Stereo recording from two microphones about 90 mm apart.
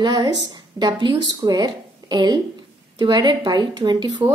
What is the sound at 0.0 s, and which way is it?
A woman's voice, 50° right (ahead or behind).